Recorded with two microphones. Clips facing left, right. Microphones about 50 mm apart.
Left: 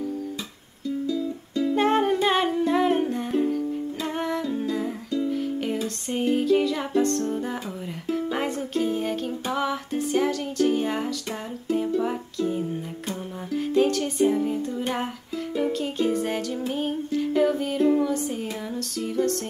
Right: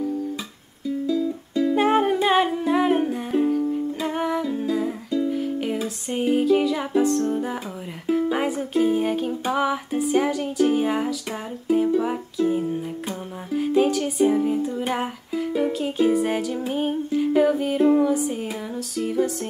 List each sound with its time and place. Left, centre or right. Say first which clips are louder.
0.8 s music: right 3 dB; centre